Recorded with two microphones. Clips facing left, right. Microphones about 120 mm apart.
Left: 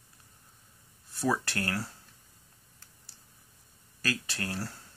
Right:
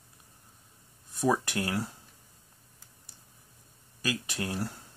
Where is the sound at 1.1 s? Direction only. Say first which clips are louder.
Right 3 dB; 15° right (ahead or behind).